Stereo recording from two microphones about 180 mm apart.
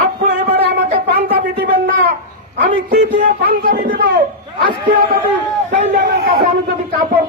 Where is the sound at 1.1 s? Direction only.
60° right (ahead or behind).